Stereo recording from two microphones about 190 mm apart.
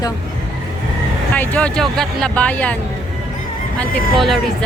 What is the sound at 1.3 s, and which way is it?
Speech, 5° left (ahead or behind).